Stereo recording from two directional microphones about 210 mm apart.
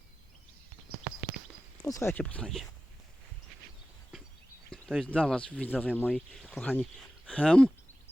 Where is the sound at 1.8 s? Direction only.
15° left (ahead or behind).